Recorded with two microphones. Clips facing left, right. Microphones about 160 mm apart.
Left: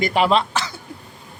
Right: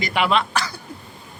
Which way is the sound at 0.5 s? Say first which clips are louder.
Even; 20° left (ahead or behind).